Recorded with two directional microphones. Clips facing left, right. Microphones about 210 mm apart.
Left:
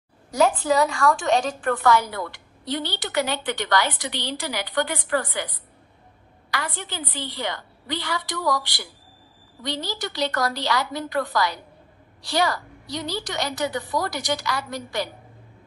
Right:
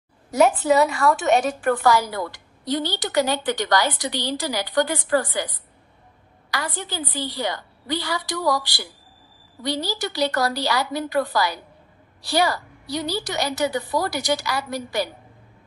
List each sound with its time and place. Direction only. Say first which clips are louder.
0.3 s a woman's voice: right 3 dB; 5° right (ahead or behind)
1.6 s a woman's voice: right 1 dB; 30° right (ahead or behind)
6.5 s a woman's voice: right 2 dB; 35° right (ahead or behind)